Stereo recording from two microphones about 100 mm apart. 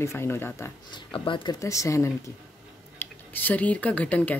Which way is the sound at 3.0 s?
20° left (ahead or behind).